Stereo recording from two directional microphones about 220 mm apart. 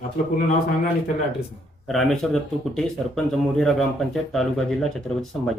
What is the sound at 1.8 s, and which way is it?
Speech, centre (ahead or behind).